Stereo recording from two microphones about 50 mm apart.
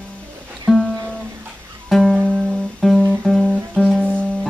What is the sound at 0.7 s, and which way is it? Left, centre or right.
Music, centre.